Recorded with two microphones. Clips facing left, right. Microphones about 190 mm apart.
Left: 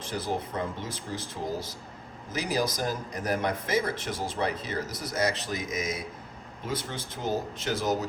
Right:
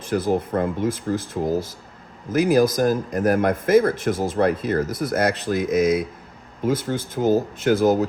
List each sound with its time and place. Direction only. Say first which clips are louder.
0.0 s speech: right 10 dB; 55° right (ahead or behind)